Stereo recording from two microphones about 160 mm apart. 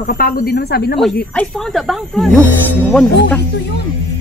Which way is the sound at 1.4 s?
5° left (ahead or behind).